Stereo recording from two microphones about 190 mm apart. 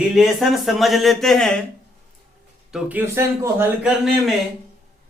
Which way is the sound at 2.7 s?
5° right (ahead or behind).